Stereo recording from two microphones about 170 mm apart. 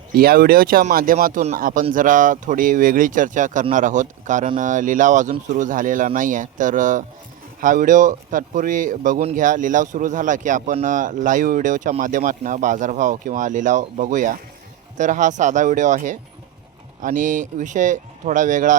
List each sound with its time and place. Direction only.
0.2 s speech: 60° right (ahead or behind)